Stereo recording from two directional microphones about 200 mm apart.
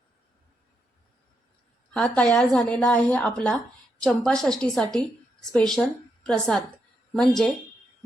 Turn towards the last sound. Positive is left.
turn(degrees=0)  # may be behind; listen again after turning